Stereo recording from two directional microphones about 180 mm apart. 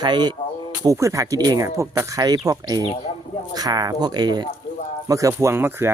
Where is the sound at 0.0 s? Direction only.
25° right (ahead or behind).